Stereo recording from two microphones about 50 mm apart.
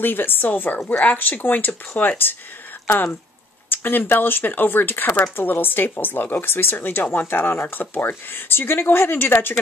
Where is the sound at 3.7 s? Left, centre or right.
Left.